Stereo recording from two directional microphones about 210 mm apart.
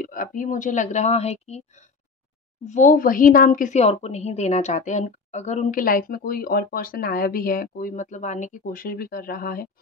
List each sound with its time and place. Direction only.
0.0 s speech: 40° left (ahead or behind)
2.6 s speech: 35° left (ahead or behind)